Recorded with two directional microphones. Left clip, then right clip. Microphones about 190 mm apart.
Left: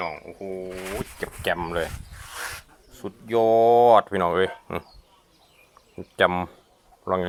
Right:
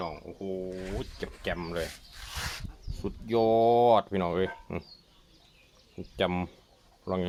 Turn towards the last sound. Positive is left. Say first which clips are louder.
# left 8 dB
turn(degrees=15)  # may be behind; listen again after turning